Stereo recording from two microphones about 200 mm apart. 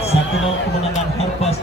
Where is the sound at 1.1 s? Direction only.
30° left (ahead or behind).